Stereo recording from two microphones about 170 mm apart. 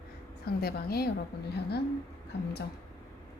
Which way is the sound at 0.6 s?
65° left (ahead or behind).